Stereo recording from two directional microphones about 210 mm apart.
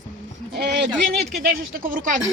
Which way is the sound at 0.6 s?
55° right (ahead or behind).